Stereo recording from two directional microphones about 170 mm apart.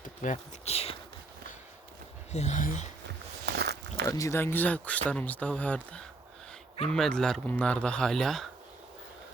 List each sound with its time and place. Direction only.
0.0 s speech: 45° left (ahead or behind)
2.3 s speech: 40° left (ahead or behind)
3.4 s a sound: 75° right (ahead or behind)
4.1 s speech: 20° left (ahead or behind); by 8.4 s centre (ahead or behind)